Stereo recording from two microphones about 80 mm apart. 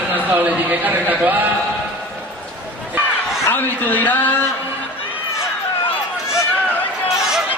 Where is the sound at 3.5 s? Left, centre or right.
Left.